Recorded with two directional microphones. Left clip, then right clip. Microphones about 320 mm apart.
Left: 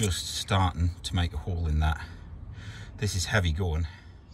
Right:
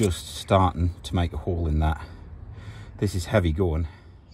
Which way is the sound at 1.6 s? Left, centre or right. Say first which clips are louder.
Even; centre.